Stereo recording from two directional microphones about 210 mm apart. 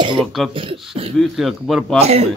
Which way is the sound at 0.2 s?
Centre (ahead or behind).